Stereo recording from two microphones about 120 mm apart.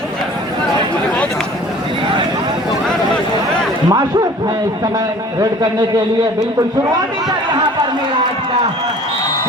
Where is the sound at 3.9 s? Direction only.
35° right (ahead or behind).